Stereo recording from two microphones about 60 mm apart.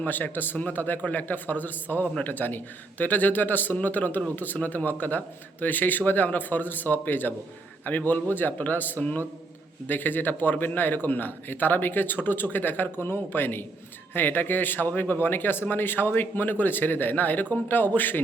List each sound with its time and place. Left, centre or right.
0.0 s a man's voice: left